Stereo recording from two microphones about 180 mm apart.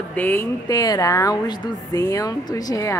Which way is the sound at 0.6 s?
20° left (ahead or behind).